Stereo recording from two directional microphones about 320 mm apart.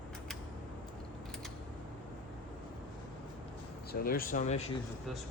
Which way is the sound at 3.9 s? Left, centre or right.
Left.